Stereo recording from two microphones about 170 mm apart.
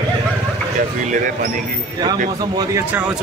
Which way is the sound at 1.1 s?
50° right (ahead or behind).